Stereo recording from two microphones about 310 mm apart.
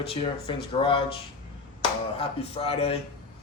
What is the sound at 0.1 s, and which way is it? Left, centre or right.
Speech, centre.